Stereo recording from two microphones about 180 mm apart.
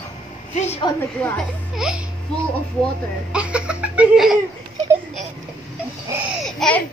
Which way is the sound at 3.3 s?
5° right (ahead or behind).